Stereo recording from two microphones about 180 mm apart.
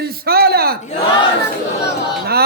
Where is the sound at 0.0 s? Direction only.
60° right (ahead or behind).